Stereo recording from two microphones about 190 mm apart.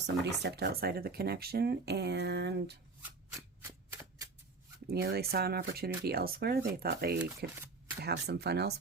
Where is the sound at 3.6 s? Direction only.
15° right (ahead or behind).